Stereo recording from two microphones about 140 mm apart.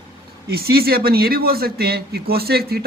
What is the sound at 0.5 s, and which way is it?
Speech, 90° right.